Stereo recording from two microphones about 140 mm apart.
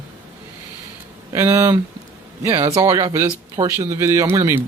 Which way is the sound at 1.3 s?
20° right (ahead or behind).